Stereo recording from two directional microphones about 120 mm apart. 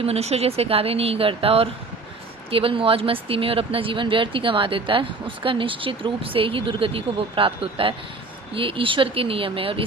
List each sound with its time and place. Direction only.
0.0 s speech: 60° right (ahead or behind)